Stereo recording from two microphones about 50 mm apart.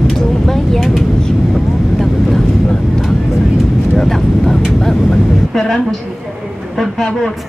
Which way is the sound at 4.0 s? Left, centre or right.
Centre.